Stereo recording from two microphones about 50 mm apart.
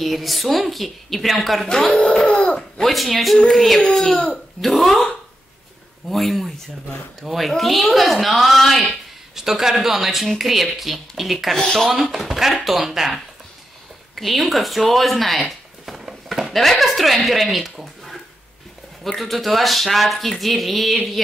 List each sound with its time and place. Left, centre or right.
0.0 s speech: centre
2.0 s a sound: centre
2.9 s speech: centre
9.3 s speech: centre
11.5 s speech: centre
11.9 s speech: centre
15.4 s a sound: centre
16.5 s speech: centre
19.0 s speech: centre